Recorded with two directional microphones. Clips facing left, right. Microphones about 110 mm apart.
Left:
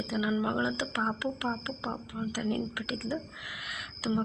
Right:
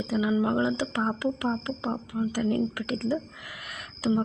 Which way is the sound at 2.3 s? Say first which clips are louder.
Right 5 dB; 45° right (ahead or behind).